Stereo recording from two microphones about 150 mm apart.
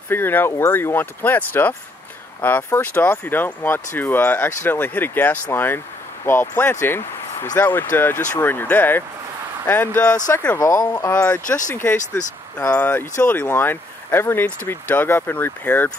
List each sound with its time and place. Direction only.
0.1 s speech: 15° left (ahead or behind)